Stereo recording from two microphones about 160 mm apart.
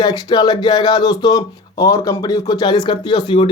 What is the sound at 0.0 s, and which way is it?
Speech, 25° left (ahead or behind).